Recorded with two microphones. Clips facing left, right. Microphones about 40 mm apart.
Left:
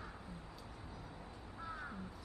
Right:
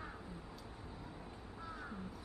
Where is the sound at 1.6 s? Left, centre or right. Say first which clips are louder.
Left 2 dB; centre.